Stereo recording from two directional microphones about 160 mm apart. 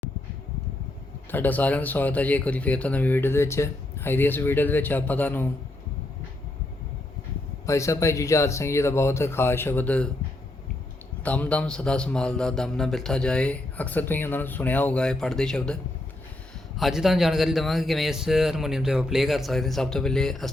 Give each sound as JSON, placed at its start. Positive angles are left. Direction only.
{"t": 1.3, "sound": "speech", "side_deg": 10}
{"t": 7.7, "sound": "speech", "side_deg": 20}
{"t": 11.2, "sound": "a man's voice", "side_deg": 10}